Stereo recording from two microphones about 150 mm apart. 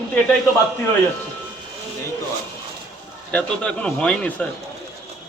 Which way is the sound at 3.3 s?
5° left (ahead or behind).